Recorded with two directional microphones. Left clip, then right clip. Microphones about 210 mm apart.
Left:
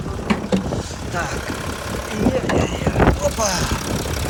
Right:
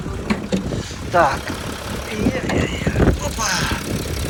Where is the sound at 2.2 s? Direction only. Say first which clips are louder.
Left 2 dB; 20° left (ahead or behind).